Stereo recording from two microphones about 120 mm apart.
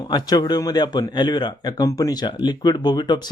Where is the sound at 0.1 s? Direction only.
35° left (ahead or behind).